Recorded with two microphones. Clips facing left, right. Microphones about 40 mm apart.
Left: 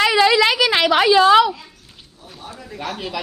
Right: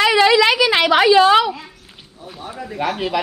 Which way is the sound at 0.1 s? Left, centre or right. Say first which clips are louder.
Right 2 dB; right.